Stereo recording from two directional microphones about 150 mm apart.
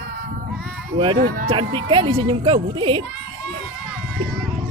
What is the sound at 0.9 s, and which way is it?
Speech, 30° right (ahead or behind).